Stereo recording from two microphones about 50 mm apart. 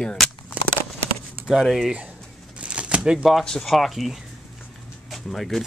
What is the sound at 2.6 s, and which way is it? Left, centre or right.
Shuffling cards, right.